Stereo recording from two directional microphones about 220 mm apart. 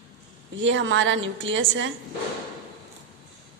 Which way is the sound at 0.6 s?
60° right (ahead or behind).